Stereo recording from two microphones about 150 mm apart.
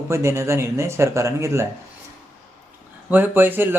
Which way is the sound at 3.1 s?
15° right (ahead or behind).